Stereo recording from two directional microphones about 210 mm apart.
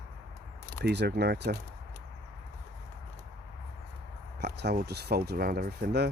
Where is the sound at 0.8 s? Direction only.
50° right (ahead or behind).